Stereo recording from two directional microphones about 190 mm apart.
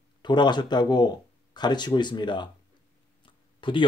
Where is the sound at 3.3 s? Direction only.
25° left (ahead or behind).